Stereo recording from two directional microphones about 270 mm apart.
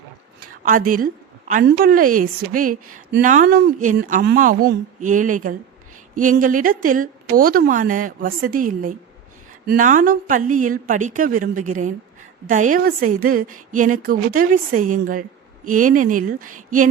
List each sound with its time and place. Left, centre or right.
0.3 s a woman's voice: right